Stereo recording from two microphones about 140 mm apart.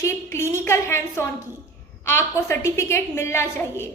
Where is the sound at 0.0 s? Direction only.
20° left (ahead or behind).